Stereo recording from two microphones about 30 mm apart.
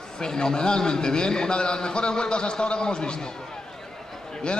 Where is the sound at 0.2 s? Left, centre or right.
Left.